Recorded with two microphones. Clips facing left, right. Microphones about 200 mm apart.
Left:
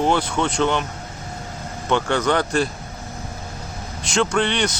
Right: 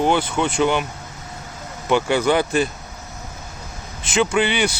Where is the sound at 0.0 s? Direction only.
Centre (ahead or behind).